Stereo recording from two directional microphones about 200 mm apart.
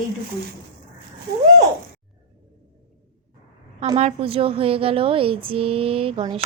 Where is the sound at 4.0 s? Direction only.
30° right (ahead or behind).